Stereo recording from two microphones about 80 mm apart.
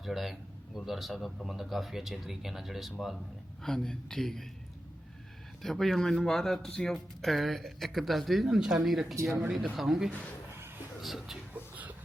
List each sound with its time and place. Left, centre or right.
0.0 s speech: centre
5.6 s speech: centre
11.5 s a sound: centre